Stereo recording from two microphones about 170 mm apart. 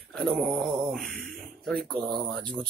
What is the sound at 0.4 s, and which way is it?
Mantra, 10° right (ahead or behind).